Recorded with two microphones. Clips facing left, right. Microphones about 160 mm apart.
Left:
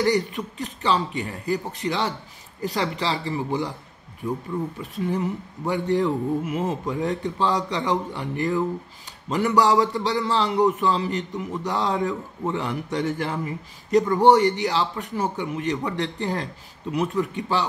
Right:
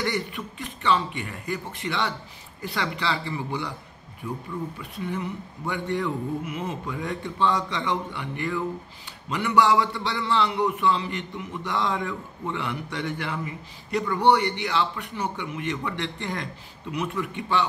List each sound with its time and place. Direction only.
0.0 s a man's voice: 40° left (ahead or behind)
4.9 s a man's voice: 40° left (ahead or behind)